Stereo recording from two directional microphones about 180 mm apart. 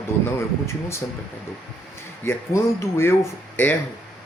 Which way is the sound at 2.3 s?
15° left (ahead or behind).